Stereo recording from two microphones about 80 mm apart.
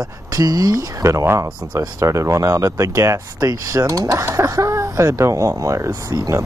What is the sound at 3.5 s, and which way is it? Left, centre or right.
Speech, right.